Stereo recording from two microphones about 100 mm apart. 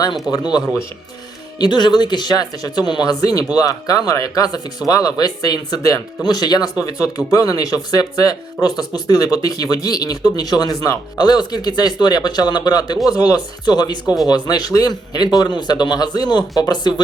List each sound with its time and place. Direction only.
0.0 s a man's voice: 45° left (ahead or behind)